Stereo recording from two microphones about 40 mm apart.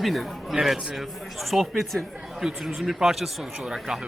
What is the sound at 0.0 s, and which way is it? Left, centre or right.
Speech, centre.